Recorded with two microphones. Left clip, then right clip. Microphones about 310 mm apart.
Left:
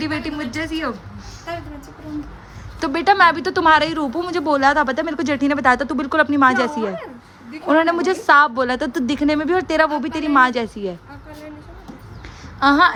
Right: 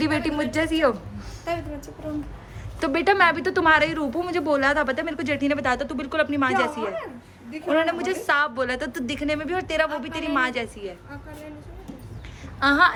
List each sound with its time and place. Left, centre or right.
0.0 s speech: centre
2.8 s a woman's voice: centre
12.5 s speech: centre